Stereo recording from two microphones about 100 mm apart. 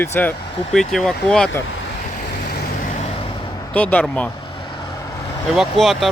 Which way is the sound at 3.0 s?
80° left.